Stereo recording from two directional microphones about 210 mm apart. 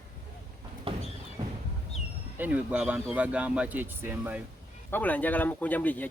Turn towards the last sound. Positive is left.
turn(degrees=10)  # may be behind; listen again after turning